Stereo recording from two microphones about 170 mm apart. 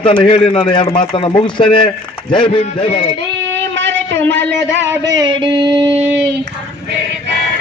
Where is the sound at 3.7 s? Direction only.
90° right.